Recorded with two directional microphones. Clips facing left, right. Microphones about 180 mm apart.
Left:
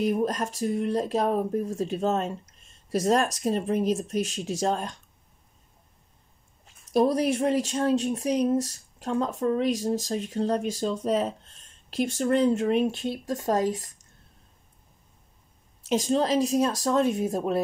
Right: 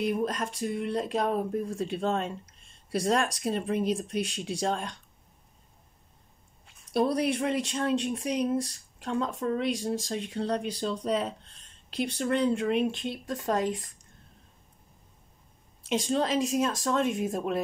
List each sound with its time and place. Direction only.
0.0 s speech: 40° left (ahead or behind)
6.6 s speech: 40° left (ahead or behind)
15.8 s speech: 40° left (ahead or behind)